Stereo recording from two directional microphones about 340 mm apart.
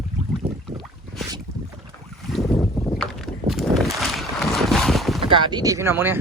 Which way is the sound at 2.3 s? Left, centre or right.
Centre.